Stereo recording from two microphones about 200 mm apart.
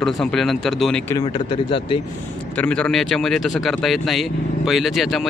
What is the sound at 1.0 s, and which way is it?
Speech, 20° left (ahead or behind).